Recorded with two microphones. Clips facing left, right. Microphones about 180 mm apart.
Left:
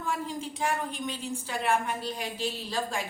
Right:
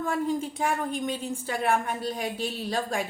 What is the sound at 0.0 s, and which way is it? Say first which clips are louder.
A woman's voice: right 6 dB; 50° right (ahead or behind).